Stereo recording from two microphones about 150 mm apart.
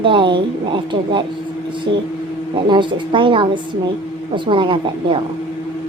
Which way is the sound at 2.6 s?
35° right (ahead or behind).